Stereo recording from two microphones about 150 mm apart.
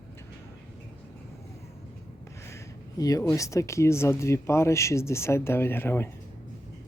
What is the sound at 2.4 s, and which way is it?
Speech, 20° left (ahead or behind).